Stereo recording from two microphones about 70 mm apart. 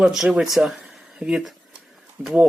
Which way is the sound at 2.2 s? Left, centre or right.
Right.